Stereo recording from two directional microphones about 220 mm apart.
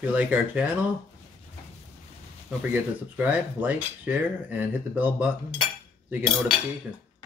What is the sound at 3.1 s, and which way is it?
Speech, 5° right (ahead or behind).